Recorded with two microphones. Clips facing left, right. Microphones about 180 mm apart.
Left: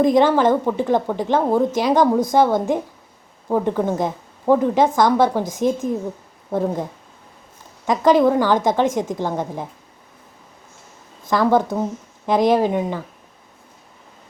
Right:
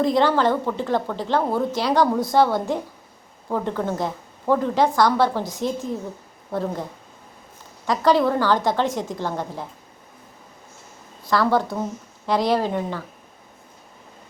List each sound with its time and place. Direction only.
0.0 s a woman's voice: 20° left (ahead or behind)
7.9 s a woman's voice: 20° left (ahead or behind)
11.3 s a woman's voice: 20° left (ahead or behind)